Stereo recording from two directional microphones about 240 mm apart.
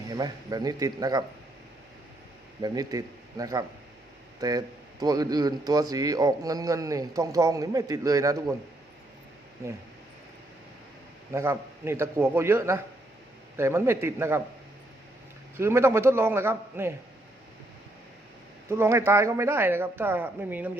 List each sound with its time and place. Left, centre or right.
0.1 s speech: centre
2.6 s speech: centre
11.3 s speech: centre
15.5 s speech: centre
18.7 s speech: centre